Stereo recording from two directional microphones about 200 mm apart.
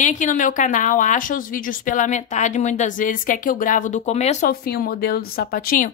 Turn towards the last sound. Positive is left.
turn(degrees=45)  # may be behind; listen again after turning